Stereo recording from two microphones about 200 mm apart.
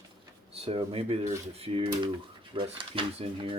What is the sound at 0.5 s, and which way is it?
Speech, 30° right (ahead or behind).